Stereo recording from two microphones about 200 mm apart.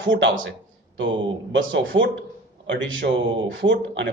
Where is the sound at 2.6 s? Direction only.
65° right (ahead or behind).